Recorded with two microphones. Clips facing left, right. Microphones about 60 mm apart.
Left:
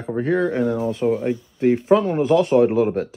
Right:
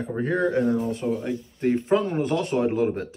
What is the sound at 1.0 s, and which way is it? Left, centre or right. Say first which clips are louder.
Speech: left 11 dB; left.